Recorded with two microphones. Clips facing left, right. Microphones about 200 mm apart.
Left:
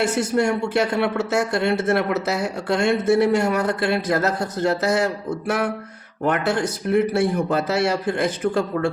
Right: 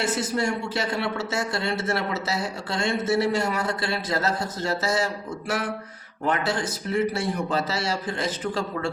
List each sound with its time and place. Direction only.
0.0 s speech: 60° left (ahead or behind)